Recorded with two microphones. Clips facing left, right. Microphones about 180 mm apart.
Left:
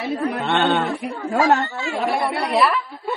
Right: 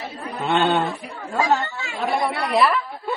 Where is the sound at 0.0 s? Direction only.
75° left (ahead or behind).